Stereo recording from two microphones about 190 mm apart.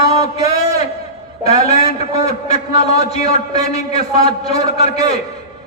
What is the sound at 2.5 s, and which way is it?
A man's voice, 30° left (ahead or behind).